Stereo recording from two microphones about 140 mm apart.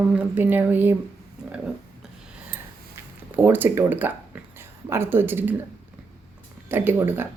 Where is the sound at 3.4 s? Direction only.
15° right (ahead or behind).